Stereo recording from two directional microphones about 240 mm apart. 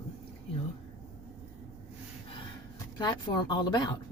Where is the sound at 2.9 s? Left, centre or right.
Centre.